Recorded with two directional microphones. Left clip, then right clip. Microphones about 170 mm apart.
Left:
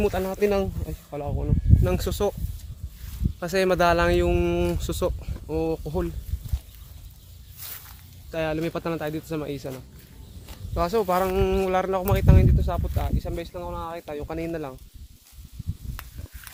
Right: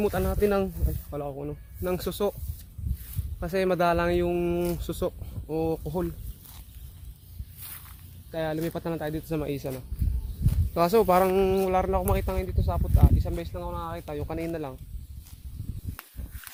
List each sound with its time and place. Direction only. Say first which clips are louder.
0.2 s speech: left 2 dB; centre (ahead or behind)
1.8 s speech: left 1 dB; 5° left (ahead or behind)
3.4 s speech: left 4 dB; 10° left (ahead or behind)
8.3 s speech: left 3 dB; 15° left (ahead or behind)
9.2 s speech: even; 30° right (ahead or behind)
10.8 s speech: right 2 dB; 60° right (ahead or behind)
11.4 s speech: left 1 dB; 10° right (ahead or behind)